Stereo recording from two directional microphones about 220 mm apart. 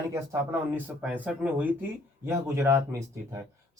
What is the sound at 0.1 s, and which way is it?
Speech, 10° right (ahead or behind).